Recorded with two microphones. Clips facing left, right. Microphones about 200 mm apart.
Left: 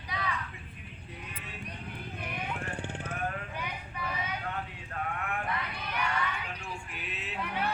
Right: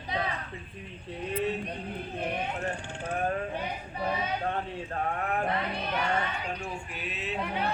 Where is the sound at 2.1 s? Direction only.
35° right (ahead or behind).